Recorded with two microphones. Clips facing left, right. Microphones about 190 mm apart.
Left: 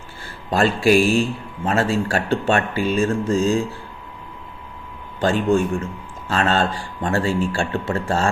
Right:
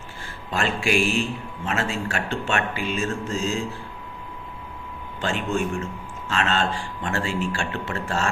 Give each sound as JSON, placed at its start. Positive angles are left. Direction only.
{"t": 0.5, "sound": "speech", "side_deg": 35}
{"t": 5.2, "sound": "speech", "side_deg": 35}